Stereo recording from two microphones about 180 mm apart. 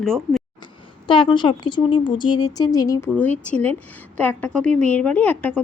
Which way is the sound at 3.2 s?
10° left (ahead or behind).